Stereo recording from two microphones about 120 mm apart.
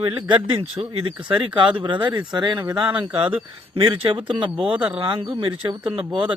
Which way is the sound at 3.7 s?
45° right (ahead or behind).